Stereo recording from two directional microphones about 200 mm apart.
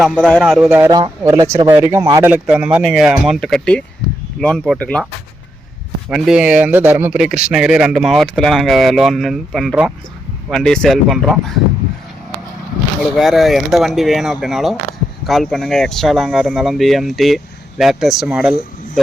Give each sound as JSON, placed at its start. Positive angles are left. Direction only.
{"t": 0.0, "sound": "speech", "side_deg": 5}
{"t": 0.9, "sound": "speech", "side_deg": -20}
{"t": 6.1, "sound": "speech", "side_deg": 0}
{"t": 13.1, "sound": "speech", "side_deg": 0}